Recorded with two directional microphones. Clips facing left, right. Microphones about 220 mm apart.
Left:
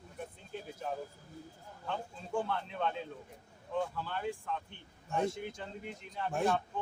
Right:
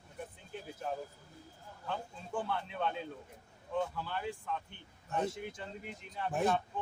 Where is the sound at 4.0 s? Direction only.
5° right (ahead or behind).